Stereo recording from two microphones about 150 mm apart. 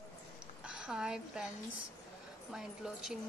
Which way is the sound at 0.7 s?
5° right (ahead or behind).